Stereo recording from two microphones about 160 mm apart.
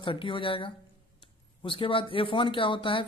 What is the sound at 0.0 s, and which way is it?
Speech, 30° left (ahead or behind).